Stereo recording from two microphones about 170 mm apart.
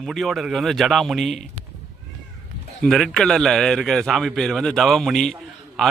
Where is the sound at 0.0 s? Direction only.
Centre (ahead or behind).